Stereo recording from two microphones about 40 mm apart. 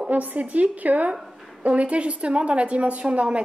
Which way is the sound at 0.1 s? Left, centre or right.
Right.